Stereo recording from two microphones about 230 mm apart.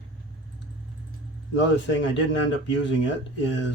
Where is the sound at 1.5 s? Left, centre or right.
Left.